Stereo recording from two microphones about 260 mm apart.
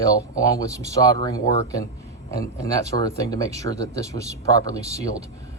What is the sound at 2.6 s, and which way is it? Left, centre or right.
Speech, centre.